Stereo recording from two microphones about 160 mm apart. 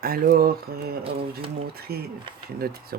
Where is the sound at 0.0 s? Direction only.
70° right (ahead or behind).